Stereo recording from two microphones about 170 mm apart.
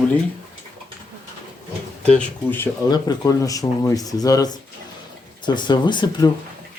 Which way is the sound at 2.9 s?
20° left (ahead or behind).